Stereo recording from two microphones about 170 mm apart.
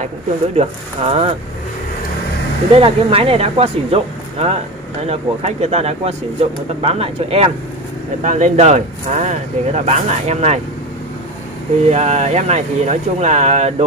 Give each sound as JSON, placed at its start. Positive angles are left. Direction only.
{"t": 0.6, "sound": "speech", "side_deg": -35}
{"t": 2.7, "sound": "speech", "side_deg": -35}
{"t": 8.2, "sound": "speech", "side_deg": -45}
{"t": 11.9, "sound": "speech", "side_deg": -40}